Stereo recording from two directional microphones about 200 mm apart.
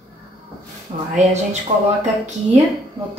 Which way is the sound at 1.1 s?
35° right (ahead or behind).